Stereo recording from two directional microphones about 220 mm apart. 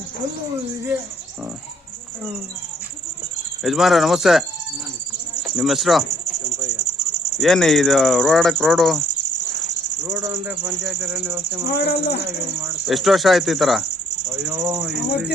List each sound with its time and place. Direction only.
3.6 s speech: centre (ahead or behind)
7.3 s speech: centre (ahead or behind)
10.1 s speech: 5° right (ahead or behind)
11.7 s speech: 45° left (ahead or behind)
12.8 s speech: centre (ahead or behind)